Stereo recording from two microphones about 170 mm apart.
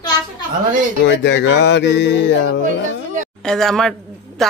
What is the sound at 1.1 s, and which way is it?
Music, 90° left.